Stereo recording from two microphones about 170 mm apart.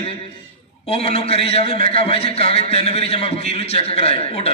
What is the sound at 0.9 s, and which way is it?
A man's voice, 35° left (ahead or behind).